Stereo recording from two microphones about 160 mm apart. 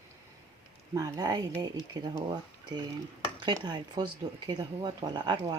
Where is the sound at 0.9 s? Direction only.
20° right (ahead or behind).